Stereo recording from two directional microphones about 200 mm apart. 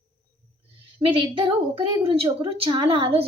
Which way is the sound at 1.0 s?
25° right (ahead or behind).